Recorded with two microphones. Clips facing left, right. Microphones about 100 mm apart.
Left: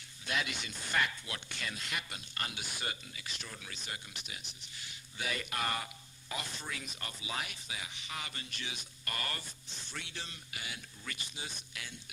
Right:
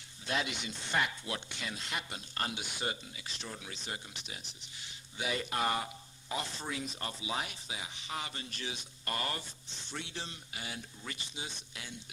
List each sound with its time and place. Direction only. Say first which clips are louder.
0.3 s speech: right 2 dB; 25° right (ahead or behind)